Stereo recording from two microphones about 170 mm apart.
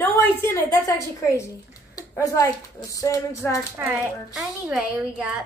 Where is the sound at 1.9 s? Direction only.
20° left (ahead or behind).